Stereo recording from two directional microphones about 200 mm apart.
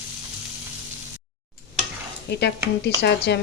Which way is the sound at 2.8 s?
60° left (ahead or behind).